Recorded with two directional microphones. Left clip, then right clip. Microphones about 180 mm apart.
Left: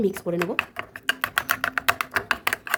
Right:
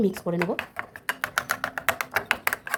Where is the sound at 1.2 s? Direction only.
20° left (ahead or behind).